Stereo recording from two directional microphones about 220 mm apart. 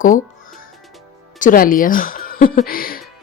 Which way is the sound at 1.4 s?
40° left (ahead or behind).